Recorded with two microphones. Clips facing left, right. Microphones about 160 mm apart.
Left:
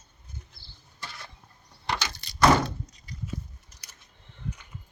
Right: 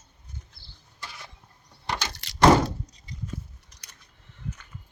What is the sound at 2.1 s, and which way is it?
Door, 90° right.